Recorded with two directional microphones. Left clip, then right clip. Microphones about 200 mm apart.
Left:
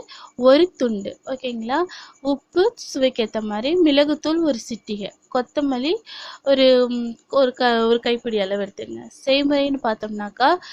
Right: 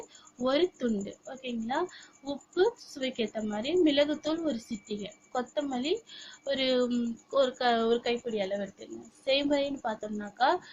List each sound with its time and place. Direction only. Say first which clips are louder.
0.4 s a woman's voice: left 13 dB; 50° left (ahead or behind)